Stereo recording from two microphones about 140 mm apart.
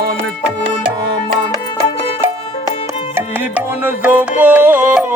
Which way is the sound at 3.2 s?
15° right (ahead or behind).